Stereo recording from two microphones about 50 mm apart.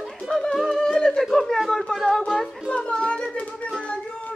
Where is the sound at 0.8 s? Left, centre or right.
Centre.